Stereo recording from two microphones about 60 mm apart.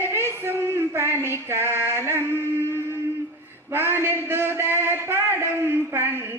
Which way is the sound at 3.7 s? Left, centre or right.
Right.